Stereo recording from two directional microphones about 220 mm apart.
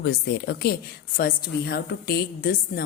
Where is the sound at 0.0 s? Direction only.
45° left (ahead or behind).